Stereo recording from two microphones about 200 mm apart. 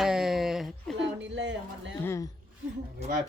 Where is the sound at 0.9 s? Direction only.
65° right (ahead or behind).